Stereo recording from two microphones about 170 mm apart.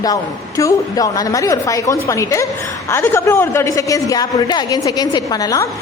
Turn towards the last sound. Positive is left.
turn(degrees=20)  # may be behind; listen again after turning